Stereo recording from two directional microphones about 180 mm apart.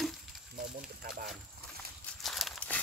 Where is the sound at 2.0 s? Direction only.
Centre (ahead or behind).